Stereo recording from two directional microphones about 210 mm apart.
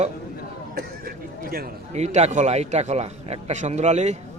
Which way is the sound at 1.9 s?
30° right (ahead or behind).